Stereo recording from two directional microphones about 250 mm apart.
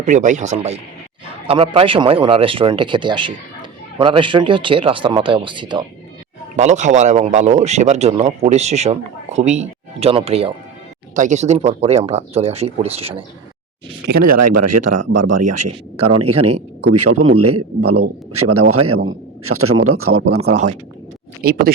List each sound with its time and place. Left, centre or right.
0.0 s speech: right
14.1 s speech: right
16.9 s a man's voice: right
21.4 s speech: right